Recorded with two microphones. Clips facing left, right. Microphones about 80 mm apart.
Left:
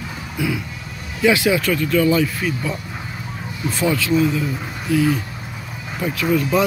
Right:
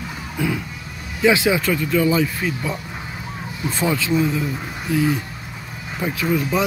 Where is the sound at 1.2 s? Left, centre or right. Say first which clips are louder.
Even; right.